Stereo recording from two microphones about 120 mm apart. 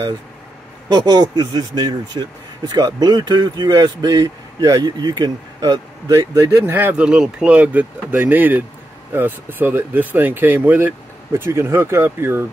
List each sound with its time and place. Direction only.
0.8 s speech: 35° right (ahead or behind)